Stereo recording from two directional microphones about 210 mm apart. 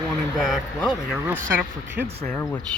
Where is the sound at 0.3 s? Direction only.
5° left (ahead or behind).